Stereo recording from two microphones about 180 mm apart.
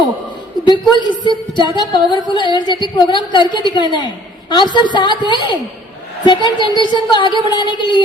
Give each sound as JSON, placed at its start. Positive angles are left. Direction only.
{"t": 0.6, "sound": "a woman's voice", "side_deg": 25}